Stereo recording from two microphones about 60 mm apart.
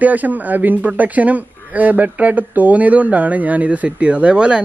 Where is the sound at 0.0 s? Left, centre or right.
Right.